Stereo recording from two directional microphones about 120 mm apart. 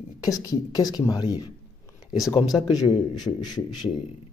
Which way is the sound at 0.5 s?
30° left (ahead or behind).